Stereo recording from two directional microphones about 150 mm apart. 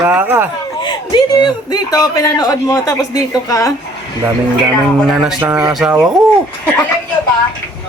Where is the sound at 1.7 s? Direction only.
25° left (ahead or behind).